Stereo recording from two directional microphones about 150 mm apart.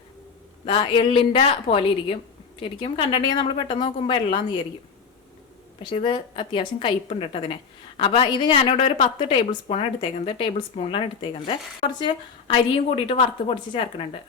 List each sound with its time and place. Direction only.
0.6 s a woman's voice: 35° left (ahead or behind)
5.8 s a woman's voice: 35° left (ahead or behind)